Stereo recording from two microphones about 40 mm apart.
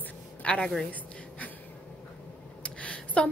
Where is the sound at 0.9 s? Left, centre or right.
Left.